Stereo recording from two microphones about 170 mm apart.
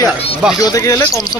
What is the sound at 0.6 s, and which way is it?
Speech, 20° left (ahead or behind).